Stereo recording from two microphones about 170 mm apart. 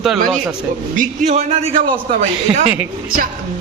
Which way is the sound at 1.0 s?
40° right (ahead or behind).